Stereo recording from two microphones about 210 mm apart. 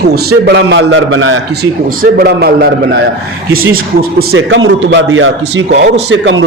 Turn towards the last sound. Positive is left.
turn(degrees=-65)  # may be behind; listen again after turning